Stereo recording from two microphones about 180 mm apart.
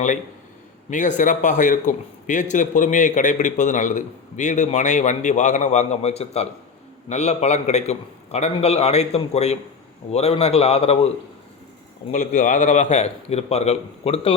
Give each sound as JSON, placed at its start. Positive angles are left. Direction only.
{"t": 0.9, "sound": "a man's voice", "side_deg": 45}
{"t": 12.1, "sound": "a man's voice", "side_deg": 45}